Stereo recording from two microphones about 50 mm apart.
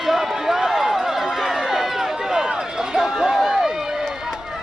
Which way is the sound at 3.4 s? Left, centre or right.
Centre.